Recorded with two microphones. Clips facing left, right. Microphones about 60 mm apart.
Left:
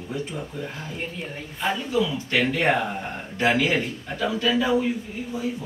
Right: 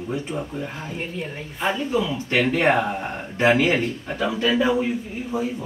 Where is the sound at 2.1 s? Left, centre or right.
Right.